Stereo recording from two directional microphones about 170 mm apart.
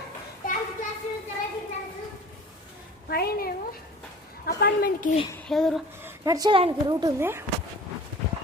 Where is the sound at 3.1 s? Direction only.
65° left (ahead or behind).